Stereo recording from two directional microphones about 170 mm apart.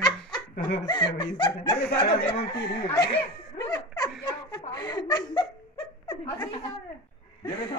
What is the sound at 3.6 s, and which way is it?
Laughter, 20° left (ahead or behind).